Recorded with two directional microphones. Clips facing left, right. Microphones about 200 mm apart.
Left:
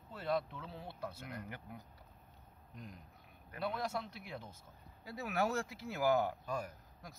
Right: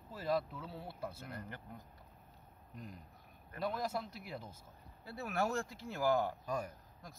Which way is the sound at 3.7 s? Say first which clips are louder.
Right 1 dB; 5° right (ahead or behind).